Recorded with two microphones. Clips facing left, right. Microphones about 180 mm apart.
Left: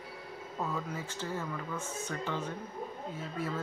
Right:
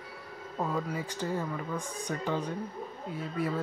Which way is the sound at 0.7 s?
15° right (ahead or behind).